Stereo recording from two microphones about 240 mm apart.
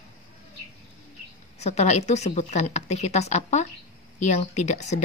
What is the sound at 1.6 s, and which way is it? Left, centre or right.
A woman's voice, left.